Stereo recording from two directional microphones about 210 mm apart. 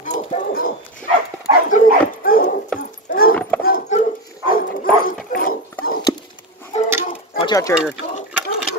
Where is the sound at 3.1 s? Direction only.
45° left (ahead or behind).